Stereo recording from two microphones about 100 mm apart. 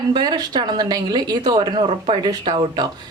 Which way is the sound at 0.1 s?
45° right (ahead or behind).